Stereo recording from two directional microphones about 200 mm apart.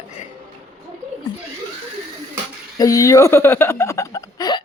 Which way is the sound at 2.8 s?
15° left (ahead or behind).